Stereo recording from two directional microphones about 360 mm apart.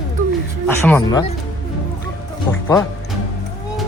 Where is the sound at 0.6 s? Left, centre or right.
Centre.